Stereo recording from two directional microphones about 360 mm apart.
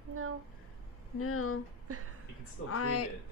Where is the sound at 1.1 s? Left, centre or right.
Left.